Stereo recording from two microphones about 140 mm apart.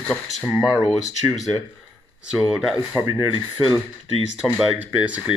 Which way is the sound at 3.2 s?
35° left (ahead or behind).